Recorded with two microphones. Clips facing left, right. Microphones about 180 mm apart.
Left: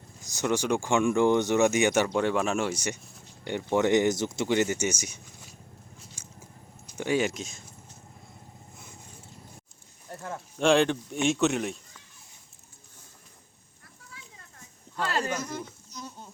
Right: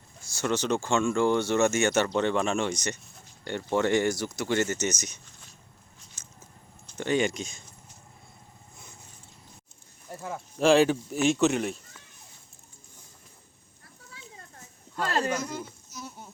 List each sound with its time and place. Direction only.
0.2 s speech: 15° left (ahead or behind)
6.2 s biting: 10° left (ahead or behind)
6.8 s speech: 10° left (ahead or behind)
10.1 s speech: 5° right (ahead or behind)
14.1 s a sound: 30° right (ahead or behind)
15.4 s insect: 10° right (ahead or behind)